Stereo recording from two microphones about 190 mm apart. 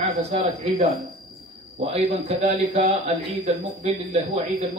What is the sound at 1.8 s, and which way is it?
Speech, 30° right (ahead or behind).